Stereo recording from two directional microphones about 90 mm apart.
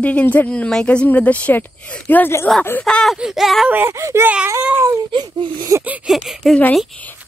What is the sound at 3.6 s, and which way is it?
Speech, 25° right (ahead or behind).